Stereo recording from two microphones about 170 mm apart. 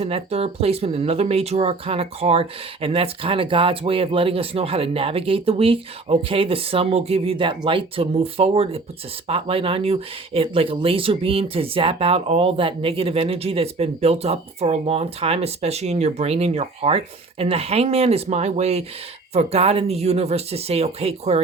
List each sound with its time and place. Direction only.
0.0 s speech: 35° right (ahead or behind)